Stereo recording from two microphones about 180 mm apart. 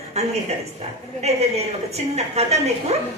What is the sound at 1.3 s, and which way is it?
A woman's voice, 35° right (ahead or behind).